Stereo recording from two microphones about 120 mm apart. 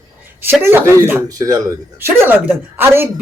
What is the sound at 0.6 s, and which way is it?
A man's voice, 20° right (ahead or behind).